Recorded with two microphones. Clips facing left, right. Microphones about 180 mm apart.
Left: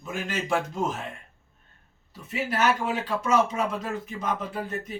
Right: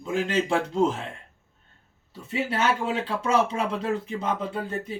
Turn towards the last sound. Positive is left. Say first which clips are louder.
# right 2 dB
turn(degrees=-30)  # may be behind; listen again after turning